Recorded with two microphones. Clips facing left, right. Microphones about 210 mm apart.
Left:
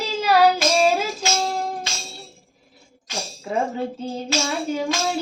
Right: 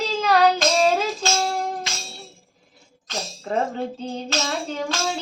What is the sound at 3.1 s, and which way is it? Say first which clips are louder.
Music: even; 10° left (ahead or behind).